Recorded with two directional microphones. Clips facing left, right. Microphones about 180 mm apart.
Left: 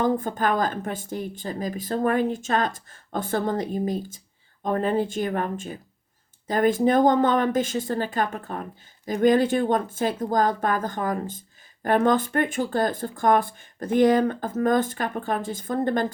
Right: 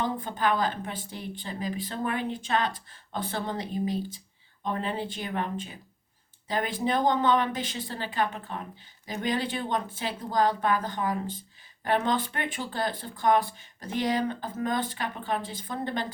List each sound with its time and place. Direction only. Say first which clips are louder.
0.0 s speech: left 5 dB; 45° left (ahead or behind)